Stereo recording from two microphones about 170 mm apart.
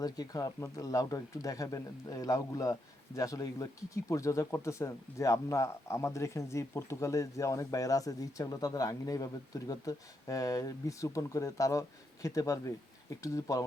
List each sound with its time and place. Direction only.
0.0 s speech: 20° left (ahead or behind)